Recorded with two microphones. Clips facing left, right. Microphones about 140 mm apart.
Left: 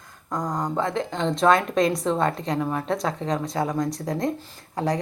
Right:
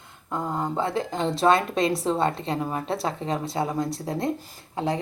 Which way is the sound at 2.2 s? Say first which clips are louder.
Left 1 dB; 30° right (ahead or behind).